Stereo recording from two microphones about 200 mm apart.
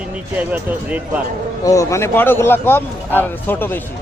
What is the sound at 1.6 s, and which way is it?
Speech, 15° left (ahead or behind).